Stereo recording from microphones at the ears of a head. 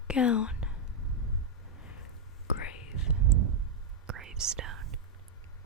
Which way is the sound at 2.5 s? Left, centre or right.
Left.